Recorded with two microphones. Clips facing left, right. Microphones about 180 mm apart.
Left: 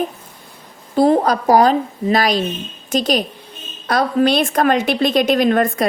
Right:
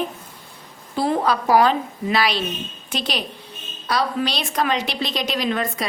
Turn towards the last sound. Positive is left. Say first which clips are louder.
# left 8 dB
turn(degrees=50)  # may be behind; listen again after turning